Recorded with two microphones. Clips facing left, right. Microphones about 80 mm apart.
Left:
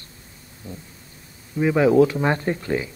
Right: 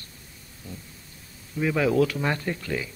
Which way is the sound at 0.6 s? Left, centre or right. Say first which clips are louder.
Left 4 dB; left.